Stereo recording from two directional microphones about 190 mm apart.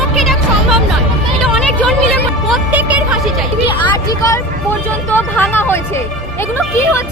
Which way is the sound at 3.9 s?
15° left (ahead or behind).